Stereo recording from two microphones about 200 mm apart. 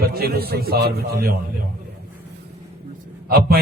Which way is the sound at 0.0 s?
50° right (ahead or behind).